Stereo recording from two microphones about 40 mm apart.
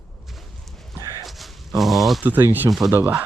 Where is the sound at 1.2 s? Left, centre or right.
Centre.